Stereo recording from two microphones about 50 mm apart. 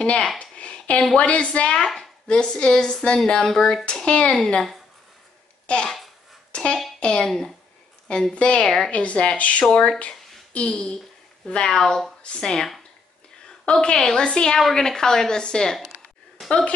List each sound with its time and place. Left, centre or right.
0.0 s speech: left
0.4 s a sound: left
1.1 s speech: left
3.8 s speech: left
5.7 s speech: centre
8.4 s speech: left
8.6 s speech: centre
8.9 s speech: left; by 12.1 s centre
12.2 s a woman's voice: centre